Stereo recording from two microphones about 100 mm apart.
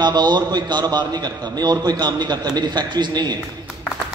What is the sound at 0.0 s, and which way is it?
A man's voice, 45° right (ahead or behind).